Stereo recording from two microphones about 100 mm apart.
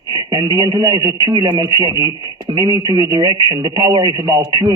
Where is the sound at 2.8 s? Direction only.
40° right (ahead or behind).